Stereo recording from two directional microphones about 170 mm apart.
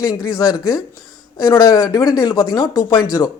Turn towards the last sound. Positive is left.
turn(degrees=25)  # may be behind; listen again after turning